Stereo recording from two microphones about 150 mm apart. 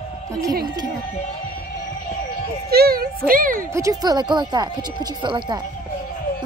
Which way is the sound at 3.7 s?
25° right (ahead or behind).